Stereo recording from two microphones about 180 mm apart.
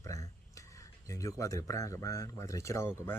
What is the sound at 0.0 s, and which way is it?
Speech, 20° left (ahead or behind).